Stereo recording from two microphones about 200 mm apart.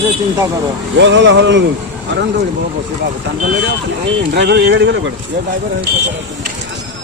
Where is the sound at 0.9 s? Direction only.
65° right (ahead or behind).